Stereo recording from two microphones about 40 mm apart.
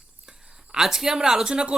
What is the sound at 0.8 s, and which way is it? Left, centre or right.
Speech, centre.